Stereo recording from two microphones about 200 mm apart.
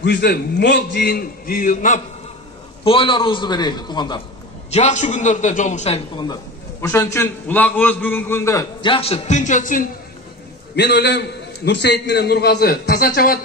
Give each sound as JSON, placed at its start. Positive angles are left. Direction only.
{"t": 0.0, "sound": "a man's voice", "side_deg": 55}
{"t": 2.8, "sound": "a man's voice", "side_deg": 25}
{"t": 4.7, "sound": "a man's voice", "side_deg": 35}
{"t": 6.8, "sound": "a man's voice", "side_deg": 15}
{"t": 8.9, "sound": "a man's voice", "side_deg": 30}
{"t": 10.8, "sound": "a man's voice", "side_deg": 55}